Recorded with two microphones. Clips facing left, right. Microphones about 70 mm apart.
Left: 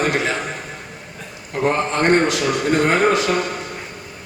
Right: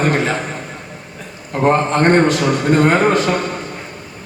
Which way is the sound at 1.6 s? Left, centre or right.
Right.